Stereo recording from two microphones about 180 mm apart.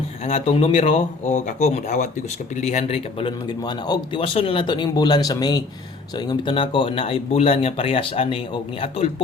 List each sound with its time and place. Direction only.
0.3 s a man's voice: 35° left (ahead or behind)